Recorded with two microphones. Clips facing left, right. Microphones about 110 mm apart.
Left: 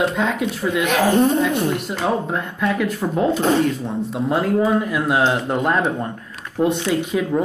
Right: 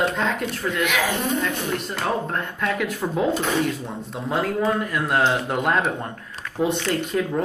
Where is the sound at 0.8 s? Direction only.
35° left (ahead or behind).